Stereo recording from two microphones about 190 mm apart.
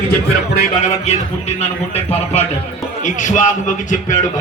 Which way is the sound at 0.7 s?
35° left (ahead or behind).